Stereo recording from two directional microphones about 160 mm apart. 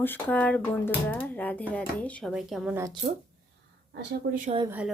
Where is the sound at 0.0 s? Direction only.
10° left (ahead or behind).